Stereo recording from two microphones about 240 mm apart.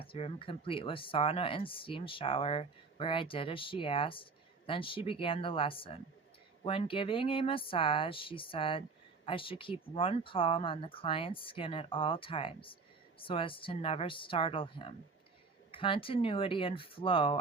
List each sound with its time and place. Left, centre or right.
0.0 s speech: left